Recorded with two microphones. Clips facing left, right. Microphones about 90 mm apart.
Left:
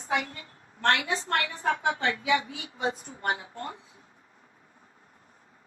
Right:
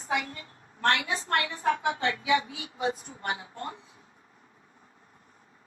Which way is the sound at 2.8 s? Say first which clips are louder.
Even; 35° left (ahead or behind).